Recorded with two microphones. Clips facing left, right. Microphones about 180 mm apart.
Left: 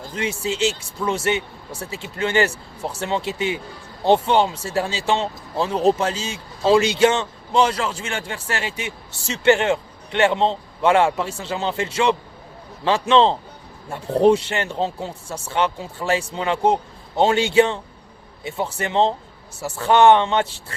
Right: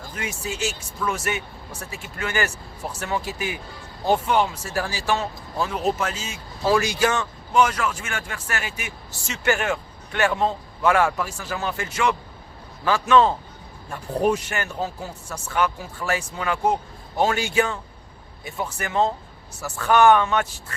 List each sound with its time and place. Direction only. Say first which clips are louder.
0.1 s speech: left 6 dB; 25° left (ahead or behind)